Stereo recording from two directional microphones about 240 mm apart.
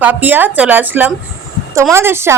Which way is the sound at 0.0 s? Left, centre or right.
Centre.